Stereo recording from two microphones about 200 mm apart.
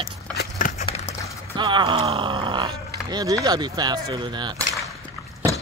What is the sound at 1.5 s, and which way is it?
Speech, 25° right (ahead or behind).